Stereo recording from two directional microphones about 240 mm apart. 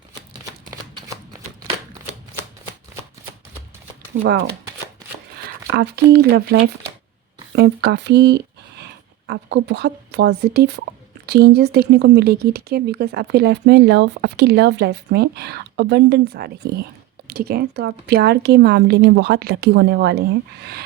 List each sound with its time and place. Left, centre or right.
5.7 s speech: right